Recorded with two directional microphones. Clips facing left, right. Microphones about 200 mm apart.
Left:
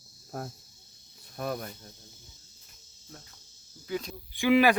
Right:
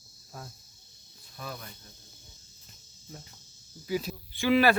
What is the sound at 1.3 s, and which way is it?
Cricket, 55° left (ahead or behind).